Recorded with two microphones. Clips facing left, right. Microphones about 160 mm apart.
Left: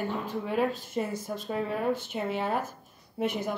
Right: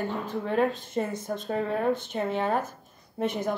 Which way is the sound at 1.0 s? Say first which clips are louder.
Right 2 dB; 50° right (ahead or behind).